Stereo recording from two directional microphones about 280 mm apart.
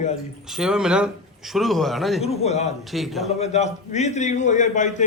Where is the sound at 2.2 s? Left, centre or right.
Left.